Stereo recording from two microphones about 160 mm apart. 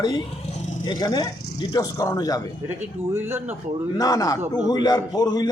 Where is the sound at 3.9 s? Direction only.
25° left (ahead or behind).